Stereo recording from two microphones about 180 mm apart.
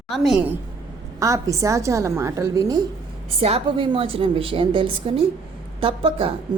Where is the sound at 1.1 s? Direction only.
15° right (ahead or behind).